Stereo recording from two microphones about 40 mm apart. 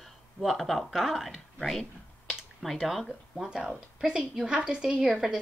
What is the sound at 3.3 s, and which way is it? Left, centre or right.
A woman's voice, centre.